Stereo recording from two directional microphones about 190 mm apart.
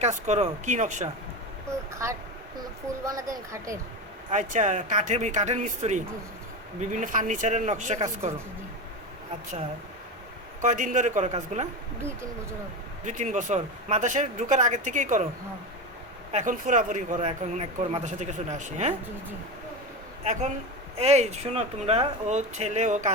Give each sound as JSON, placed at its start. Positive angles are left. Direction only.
{"t": 0.0, "sound": "a man's voice", "side_deg": -35}
{"t": 1.9, "sound": "a sound", "side_deg": -15}
{"t": 3.0, "sound": "speech", "side_deg": -15}
{"t": 4.3, "sound": "a man's voice", "side_deg": -40}
{"t": 10.6, "sound": "a man's voice", "side_deg": -40}
{"t": 13.1, "sound": "a man's voice", "side_deg": -40}
{"t": 16.3, "sound": "a man's voice", "side_deg": -40}
{"t": 20.2, "sound": "a man's voice", "side_deg": -40}